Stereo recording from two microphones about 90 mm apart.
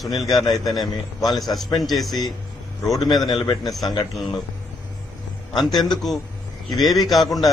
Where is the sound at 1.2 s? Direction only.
45° left (ahead or behind).